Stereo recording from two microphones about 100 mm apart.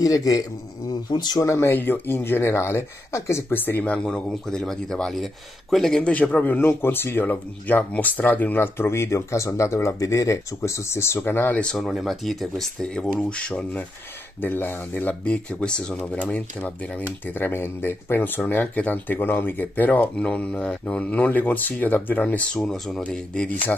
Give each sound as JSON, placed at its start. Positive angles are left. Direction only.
{"t": 0.0, "sound": "speech", "side_deg": 35}
{"t": 1.5, "sound": "speech", "side_deg": 25}
{"t": 11.6, "sound": "speech", "side_deg": 0}